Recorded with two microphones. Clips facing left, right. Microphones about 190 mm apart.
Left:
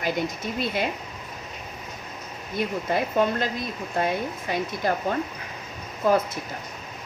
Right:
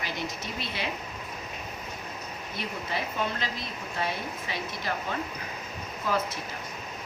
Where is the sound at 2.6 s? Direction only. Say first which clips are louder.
Left 9 dB; 50° left (ahead or behind).